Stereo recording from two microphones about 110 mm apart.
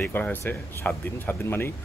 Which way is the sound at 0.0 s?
15° left (ahead or behind).